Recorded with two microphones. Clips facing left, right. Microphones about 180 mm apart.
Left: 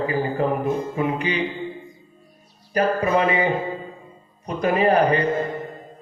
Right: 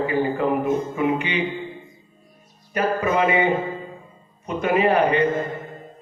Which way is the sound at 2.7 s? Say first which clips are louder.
Left 2 dB; 35° left (ahead or behind).